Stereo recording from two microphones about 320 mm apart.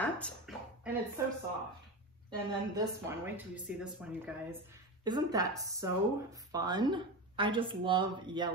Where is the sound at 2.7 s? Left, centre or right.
Centre.